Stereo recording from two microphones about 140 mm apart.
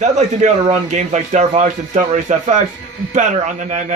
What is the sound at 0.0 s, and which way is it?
Speech, 55° right (ahead or behind).